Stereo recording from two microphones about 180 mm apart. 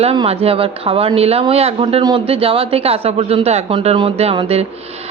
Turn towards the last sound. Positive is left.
turn(degrees=-30)  # may be behind; listen again after turning